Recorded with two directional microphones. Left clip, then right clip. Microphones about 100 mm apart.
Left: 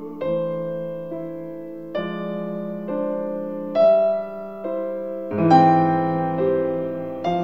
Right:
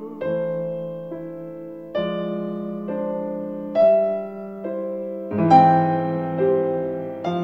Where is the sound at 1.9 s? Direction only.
30° left (ahead or behind).